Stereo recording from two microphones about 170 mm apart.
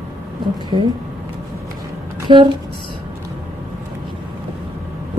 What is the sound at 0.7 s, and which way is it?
Speech, 30° right (ahead or behind).